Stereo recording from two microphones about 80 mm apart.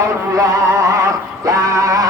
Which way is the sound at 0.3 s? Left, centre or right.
Right.